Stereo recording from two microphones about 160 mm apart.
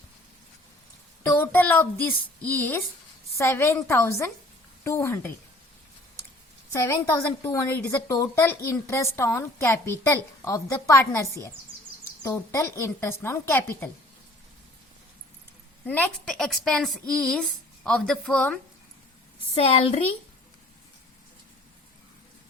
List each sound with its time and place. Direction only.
1.4 s a woman's voice: 10° left (ahead or behind)
6.7 s a woman's voice: 15° left (ahead or behind)
15.9 s a woman's voice: 5° left (ahead or behind)
19.5 s a woman's voice: 40° left (ahead or behind)